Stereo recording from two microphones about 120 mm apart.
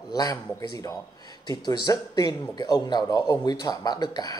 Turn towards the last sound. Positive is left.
turn(degrees=35)  # may be behind; listen again after turning